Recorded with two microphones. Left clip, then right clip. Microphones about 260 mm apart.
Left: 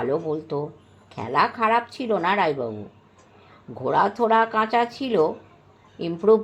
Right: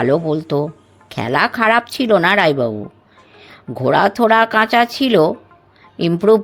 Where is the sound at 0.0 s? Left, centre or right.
Right.